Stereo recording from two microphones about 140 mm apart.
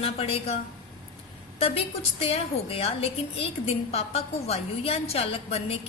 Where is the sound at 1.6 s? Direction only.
45° left (ahead or behind).